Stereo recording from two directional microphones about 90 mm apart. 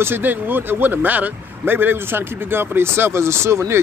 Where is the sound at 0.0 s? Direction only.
20° right (ahead or behind).